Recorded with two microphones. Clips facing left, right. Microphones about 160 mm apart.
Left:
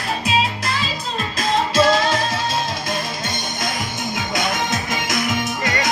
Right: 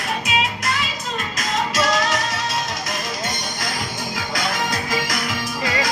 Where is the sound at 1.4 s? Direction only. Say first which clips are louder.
Left 6 dB; 30° left (ahead or behind).